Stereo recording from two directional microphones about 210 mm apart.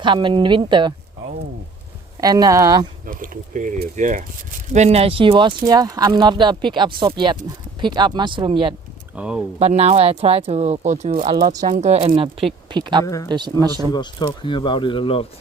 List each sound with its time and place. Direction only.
0.0 s speech: 25° right (ahead or behind)
2.2 s speech: 20° right (ahead or behind)
3.1 s speech: 40° right (ahead or behind)
9.1 s speech: 5° right (ahead or behind)
9.6 s speech: 30° right (ahead or behind)
13.9 s speech: 20° left (ahead or behind)